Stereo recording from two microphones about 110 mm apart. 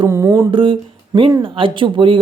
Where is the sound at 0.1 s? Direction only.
25° right (ahead or behind).